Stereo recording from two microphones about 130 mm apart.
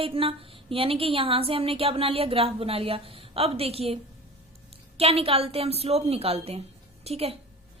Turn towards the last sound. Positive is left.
turn(degrees=-50)  # may be behind; listen again after turning